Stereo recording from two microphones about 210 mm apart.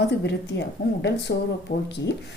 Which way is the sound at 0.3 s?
55° left (ahead or behind).